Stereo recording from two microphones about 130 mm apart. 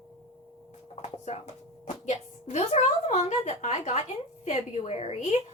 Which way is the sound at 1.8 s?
60° left (ahead or behind).